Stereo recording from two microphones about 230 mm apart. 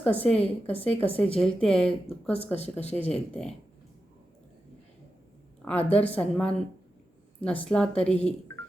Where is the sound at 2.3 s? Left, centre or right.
Left.